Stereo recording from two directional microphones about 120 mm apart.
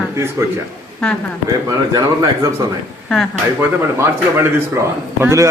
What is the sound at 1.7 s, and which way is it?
Speech, 30° right (ahead or behind).